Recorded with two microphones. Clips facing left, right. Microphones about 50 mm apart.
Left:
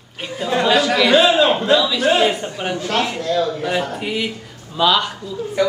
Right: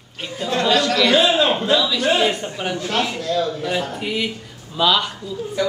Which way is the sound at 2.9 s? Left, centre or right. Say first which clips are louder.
Left 2 dB; left.